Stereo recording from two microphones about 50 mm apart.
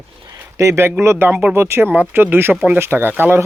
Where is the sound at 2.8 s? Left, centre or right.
Right.